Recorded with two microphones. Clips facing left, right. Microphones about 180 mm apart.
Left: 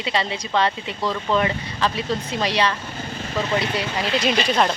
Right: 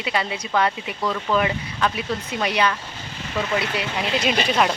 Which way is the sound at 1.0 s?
5° left (ahead or behind).